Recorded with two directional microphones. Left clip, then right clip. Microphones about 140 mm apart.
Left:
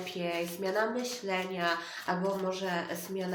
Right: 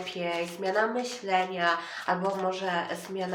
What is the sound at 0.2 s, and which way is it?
Speech, 20° left (ahead or behind).